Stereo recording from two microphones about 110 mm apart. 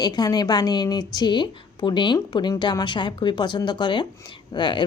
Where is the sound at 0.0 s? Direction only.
40° left (ahead or behind).